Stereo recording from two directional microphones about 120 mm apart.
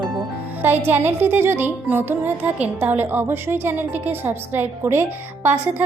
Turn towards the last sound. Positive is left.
turn(degrees=-20)  # may be behind; listen again after turning